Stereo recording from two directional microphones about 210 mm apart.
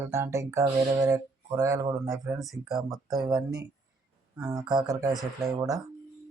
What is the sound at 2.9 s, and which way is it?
Speech, 15° right (ahead or behind).